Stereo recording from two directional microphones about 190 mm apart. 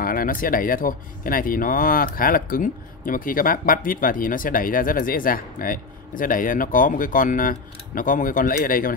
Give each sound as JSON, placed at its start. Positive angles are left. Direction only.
{"t": 0.0, "sound": "speech", "side_deg": 50}